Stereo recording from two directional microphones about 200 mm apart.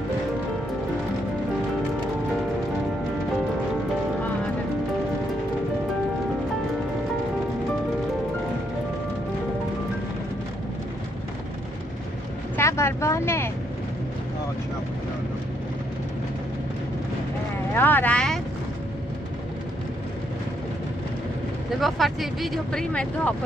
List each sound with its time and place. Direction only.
12.5 s vehicle: 15° left (ahead or behind)
17.7 s vehicle: 10° left (ahead or behind)
21.7 s speech: centre (ahead or behind)